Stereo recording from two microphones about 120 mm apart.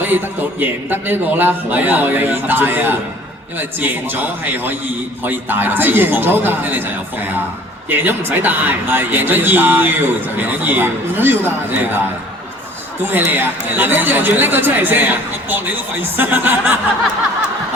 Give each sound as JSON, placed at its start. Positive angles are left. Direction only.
{"t": 0.0, "sound": "a man's voice", "side_deg": -15}
{"t": 7.9, "sound": "a man's voice", "side_deg": -15}
{"t": 13.0, "sound": "a man's voice", "side_deg": -15}